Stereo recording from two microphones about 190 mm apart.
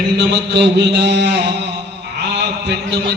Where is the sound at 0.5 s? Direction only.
65° right (ahead or behind).